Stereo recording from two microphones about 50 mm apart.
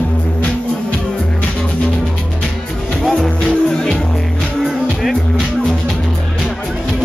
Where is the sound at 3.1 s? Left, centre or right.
Centre.